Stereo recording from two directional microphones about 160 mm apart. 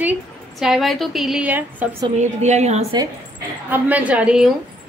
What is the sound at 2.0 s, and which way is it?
Speech, 45° right (ahead or behind).